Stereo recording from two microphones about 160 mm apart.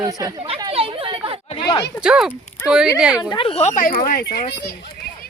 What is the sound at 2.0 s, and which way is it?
Speech, 5° right (ahead or behind).